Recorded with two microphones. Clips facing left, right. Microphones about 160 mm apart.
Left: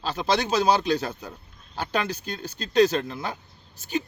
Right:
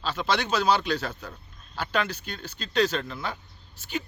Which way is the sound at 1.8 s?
45° left (ahead or behind).